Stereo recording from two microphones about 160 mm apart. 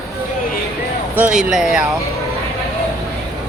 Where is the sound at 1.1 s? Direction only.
5° right (ahead or behind).